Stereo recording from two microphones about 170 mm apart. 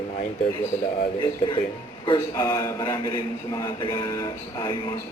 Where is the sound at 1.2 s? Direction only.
30° left (ahead or behind).